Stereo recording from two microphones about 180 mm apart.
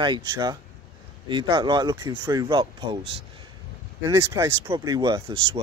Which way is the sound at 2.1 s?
10° right (ahead or behind).